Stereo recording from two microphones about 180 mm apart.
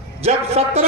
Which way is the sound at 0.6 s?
40° right (ahead or behind).